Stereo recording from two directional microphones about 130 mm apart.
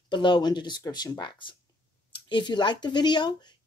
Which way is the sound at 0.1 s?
35° left (ahead or behind).